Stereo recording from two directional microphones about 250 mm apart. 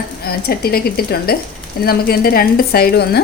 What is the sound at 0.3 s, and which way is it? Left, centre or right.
Speech, left.